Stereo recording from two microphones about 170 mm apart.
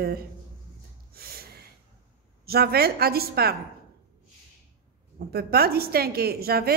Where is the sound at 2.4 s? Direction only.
65° right (ahead or behind).